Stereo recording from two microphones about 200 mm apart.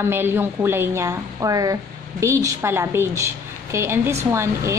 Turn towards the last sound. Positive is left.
turn(degrees=-15)  # may be behind; listen again after turning